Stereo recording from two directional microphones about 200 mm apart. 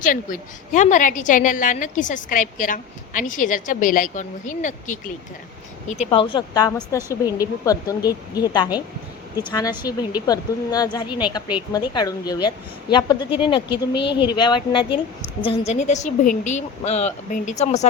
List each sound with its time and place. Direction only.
0.0 s a woman's voice: 40° left (ahead or behind)